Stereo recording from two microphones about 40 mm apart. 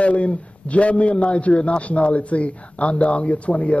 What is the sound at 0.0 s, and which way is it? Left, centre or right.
A man's voice, left.